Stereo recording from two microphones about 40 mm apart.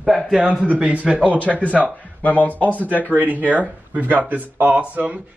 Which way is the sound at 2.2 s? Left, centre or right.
Left.